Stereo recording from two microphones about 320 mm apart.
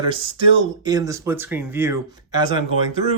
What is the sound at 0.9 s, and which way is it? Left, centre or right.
Speech, centre.